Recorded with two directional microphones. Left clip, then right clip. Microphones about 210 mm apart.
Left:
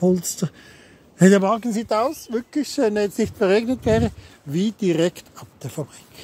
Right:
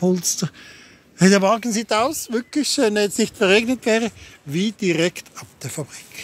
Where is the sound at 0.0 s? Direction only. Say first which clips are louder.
Even; 15° left (ahead or behind).